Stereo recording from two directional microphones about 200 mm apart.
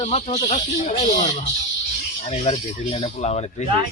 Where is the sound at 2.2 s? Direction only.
35° left (ahead or behind).